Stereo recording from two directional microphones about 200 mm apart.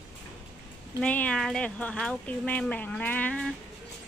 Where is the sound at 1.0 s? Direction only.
5° left (ahead or behind).